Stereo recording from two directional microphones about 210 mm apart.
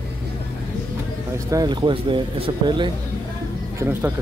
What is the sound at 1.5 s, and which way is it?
Speech, 20° right (ahead or behind).